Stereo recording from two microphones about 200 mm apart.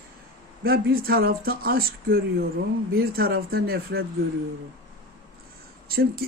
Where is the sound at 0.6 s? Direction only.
50° right (ahead or behind).